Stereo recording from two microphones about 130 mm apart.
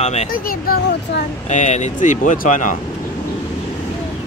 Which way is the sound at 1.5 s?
65° left (ahead or behind).